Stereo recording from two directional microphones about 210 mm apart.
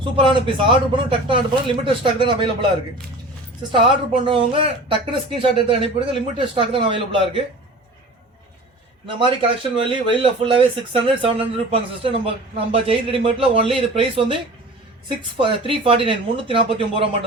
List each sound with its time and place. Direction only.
0.0 s speech: 25° right (ahead or behind)
3.7 s speech: 25° right (ahead or behind)
9.0 s speech: 25° right (ahead or behind)